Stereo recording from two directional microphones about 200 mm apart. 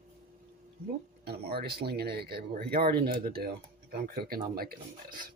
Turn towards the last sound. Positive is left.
turn(degrees=-45)  # may be behind; listen again after turning